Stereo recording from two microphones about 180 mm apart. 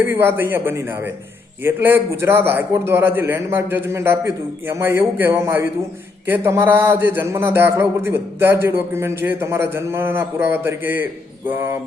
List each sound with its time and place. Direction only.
0.0 s a man's voice: 10° right (ahead or behind)